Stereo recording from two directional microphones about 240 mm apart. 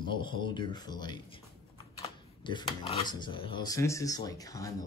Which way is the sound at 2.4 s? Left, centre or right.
Centre.